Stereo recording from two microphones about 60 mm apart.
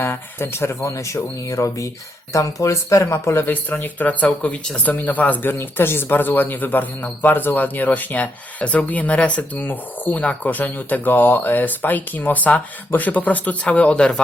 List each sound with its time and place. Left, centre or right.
0.0 s speech: left
0.9 s speech: left
3.5 s speech: left